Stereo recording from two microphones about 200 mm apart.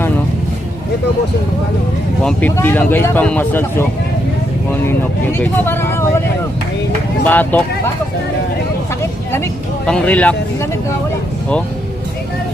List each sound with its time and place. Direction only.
2.2 s speech: 10° left (ahead or behind)
5.4 s speech: 10° left (ahead or behind)
7.3 s speech: 10° left (ahead or behind)
9.8 s speech: 5° left (ahead or behind)